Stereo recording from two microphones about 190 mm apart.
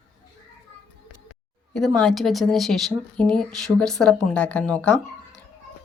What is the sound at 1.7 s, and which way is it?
A woman's voice, 5° left (ahead or behind).